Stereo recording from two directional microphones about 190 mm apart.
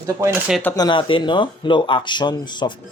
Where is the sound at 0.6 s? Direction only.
20° left (ahead or behind).